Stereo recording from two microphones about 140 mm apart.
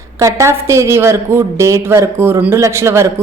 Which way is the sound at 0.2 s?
20° right (ahead or behind).